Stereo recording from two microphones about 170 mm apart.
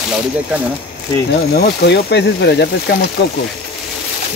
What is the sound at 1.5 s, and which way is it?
Speech, 70° left (ahead or behind).